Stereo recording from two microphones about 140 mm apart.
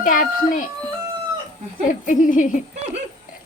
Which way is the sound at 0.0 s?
80° left.